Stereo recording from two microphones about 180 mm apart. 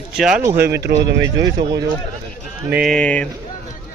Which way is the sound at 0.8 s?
70° right (ahead or behind).